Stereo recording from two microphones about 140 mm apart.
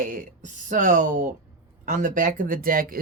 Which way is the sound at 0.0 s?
70° right (ahead or behind).